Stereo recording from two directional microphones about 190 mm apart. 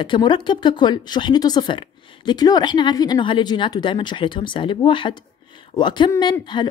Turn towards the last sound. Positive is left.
turn(degrees=25)  # may be behind; listen again after turning